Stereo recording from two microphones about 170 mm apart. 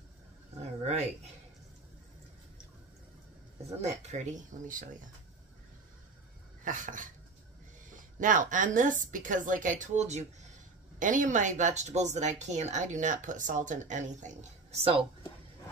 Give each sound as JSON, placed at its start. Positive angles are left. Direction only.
{"t": 3.8, "sound": "speech", "side_deg": -45}
{"t": 6.6, "sound": "speech", "side_deg": -50}
{"t": 8.2, "sound": "speech", "side_deg": -50}